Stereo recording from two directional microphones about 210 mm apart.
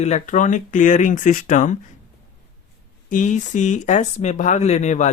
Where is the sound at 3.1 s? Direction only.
35° left (ahead or behind).